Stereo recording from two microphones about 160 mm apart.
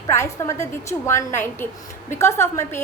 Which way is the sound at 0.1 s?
15° left (ahead or behind).